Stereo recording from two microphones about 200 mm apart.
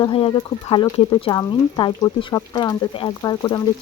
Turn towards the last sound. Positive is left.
turn(degrees=20)  # may be behind; listen again after turning